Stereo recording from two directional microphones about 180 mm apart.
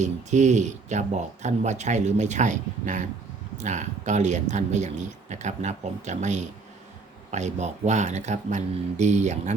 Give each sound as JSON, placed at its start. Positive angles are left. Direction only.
{"t": 0.0, "sound": "speech", "side_deg": -40}